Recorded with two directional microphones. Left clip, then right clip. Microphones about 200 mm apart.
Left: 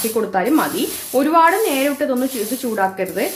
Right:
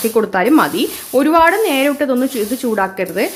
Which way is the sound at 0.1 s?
35° right (ahead or behind).